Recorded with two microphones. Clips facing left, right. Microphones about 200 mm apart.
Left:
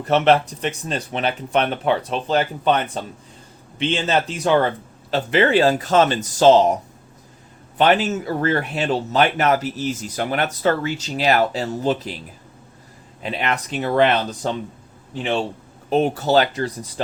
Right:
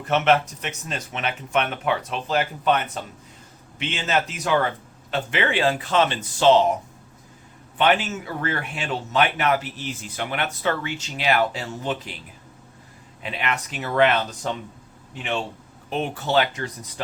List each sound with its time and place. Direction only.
0.0 s speech: 35° left (ahead or behind)
7.8 s speech: 40° left (ahead or behind)
13.2 s speech: 35° left (ahead or behind)